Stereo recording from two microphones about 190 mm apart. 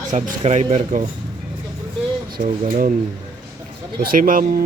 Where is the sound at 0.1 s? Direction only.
40° right (ahead or behind).